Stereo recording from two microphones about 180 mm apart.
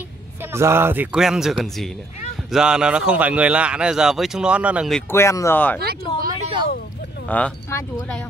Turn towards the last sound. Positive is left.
turn(degrees=10)  # may be behind; listen again after turning